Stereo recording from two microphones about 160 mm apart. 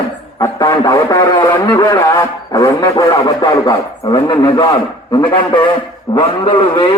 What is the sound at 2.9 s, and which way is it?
A man's voice, 30° left (ahead or behind).